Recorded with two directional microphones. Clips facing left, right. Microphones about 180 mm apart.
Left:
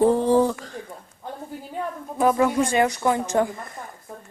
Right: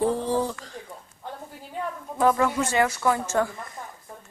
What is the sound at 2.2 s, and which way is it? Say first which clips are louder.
A woman's voice: left 2 dB; 15° left (ahead or behind).